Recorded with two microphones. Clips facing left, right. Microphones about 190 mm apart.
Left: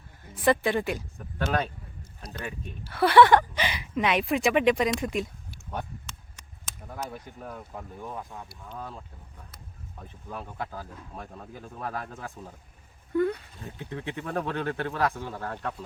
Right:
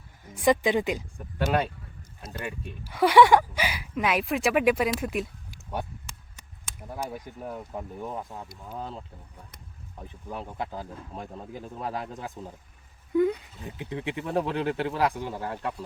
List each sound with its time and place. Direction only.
0.3 s speech: 10° right (ahead or behind)
6.7 s speech: 10° right (ahead or behind)